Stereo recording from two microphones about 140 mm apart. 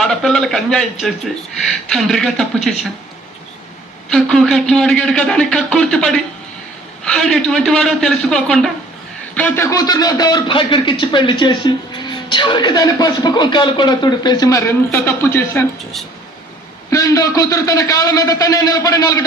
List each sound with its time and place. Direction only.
0.0 s a man's voice: 5° left (ahead or behind)
4.1 s a man's voice: centre (ahead or behind)
9.6 s speech: 25° left (ahead or behind)
16.9 s a man's voice: 25° left (ahead or behind)